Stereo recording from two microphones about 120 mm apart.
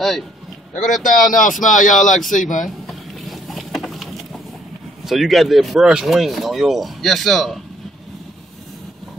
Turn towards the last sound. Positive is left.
turn(degrees=0)  # may be behind; listen again after turning